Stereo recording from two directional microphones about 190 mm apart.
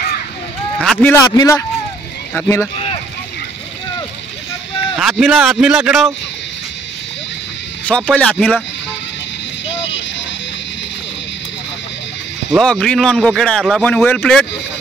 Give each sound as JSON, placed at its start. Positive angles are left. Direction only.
{"t": 0.7, "sound": "a man's voice", "side_deg": 5}
{"t": 1.1, "sound": "a man's voice", "side_deg": 20}
{"t": 4.9, "sound": "a man's voice", "side_deg": 0}
{"t": 7.8, "sound": "a man's voice", "side_deg": 5}
{"t": 12.5, "sound": "a man's voice", "side_deg": 5}